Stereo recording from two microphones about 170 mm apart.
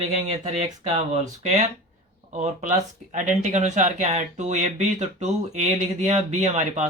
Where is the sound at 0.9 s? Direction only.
40° right (ahead or behind).